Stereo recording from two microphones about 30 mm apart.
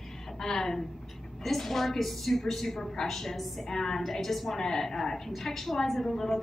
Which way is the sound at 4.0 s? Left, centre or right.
Centre.